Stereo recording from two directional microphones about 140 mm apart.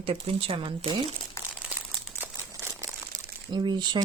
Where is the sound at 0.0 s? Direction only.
45° right (ahead or behind).